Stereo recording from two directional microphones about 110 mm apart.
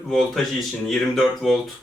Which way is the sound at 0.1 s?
5° left (ahead or behind).